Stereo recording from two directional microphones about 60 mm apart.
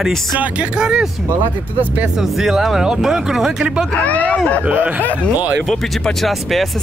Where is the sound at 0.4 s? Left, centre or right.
Centre.